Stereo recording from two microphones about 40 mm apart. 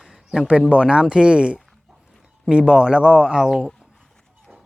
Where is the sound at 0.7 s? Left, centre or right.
Right.